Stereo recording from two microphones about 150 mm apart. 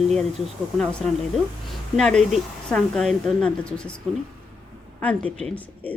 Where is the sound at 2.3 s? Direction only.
5° left (ahead or behind).